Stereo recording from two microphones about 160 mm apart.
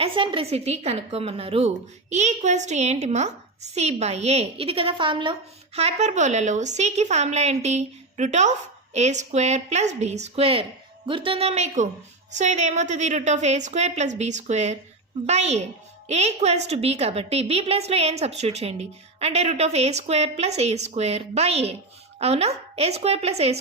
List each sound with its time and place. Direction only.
0.0 s a woman's voice: 30° right (ahead or behind)